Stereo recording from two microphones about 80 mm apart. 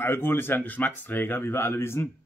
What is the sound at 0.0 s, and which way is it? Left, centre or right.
Speech, left.